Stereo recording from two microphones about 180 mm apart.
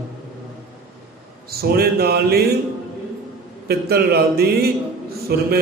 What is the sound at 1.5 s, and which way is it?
Speech, 60° right (ahead or behind).